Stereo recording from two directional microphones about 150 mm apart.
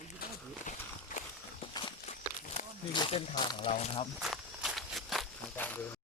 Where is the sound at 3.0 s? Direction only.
35° left (ahead or behind).